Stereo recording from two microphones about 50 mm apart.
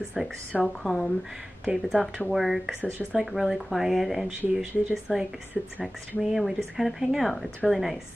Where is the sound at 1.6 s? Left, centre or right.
Centre.